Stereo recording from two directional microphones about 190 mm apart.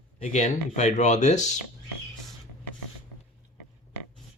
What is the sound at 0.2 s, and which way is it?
Speech, 40° left (ahead or behind).